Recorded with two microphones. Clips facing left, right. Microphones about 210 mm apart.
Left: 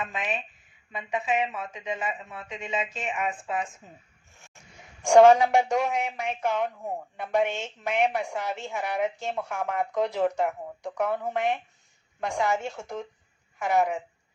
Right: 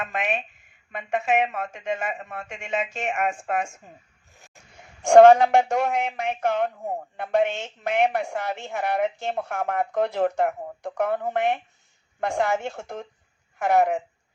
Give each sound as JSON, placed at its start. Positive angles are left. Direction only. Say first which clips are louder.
{"t": 0.0, "sound": "a woman's voice", "louder": "right 4 dB", "side_deg": -60}
{"t": 2.9, "sound": "speech", "louder": "right 4 dB", "side_deg": -70}
{"t": 3.2, "sound": "speech", "louder": "right 4 dB", "side_deg": -55}
{"t": 5.0, "sound": "a woman's voice", "louder": "right 4 dB", "side_deg": -55}